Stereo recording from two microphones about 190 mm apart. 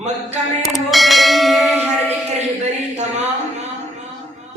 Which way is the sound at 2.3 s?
35° right (ahead or behind).